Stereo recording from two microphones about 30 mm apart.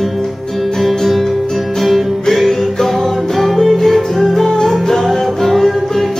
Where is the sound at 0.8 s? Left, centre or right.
Centre.